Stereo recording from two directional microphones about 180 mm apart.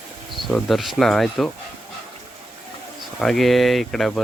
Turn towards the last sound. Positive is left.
turn(degrees=0)  # may be behind; listen again after turning